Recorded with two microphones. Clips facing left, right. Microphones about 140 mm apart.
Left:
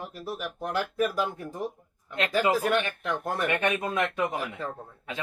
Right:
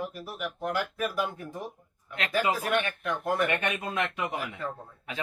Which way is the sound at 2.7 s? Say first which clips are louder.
Left 2 dB; 35° left (ahead or behind).